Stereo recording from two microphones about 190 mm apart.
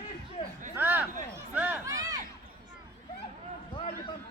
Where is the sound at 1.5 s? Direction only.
10° right (ahead or behind).